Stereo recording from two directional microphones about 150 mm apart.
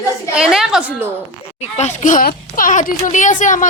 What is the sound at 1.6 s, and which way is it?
Speech, 50° left (ahead or behind).